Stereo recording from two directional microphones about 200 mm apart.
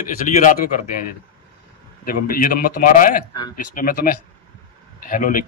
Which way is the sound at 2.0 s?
45° left (ahead or behind).